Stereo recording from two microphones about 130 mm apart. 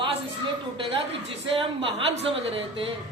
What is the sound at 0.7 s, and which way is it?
A woman's voice, 45° right (ahead or behind).